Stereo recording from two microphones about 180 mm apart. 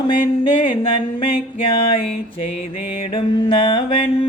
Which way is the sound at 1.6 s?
30° left (ahead or behind).